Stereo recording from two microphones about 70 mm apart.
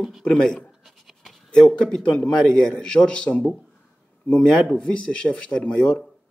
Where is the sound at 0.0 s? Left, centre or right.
Centre.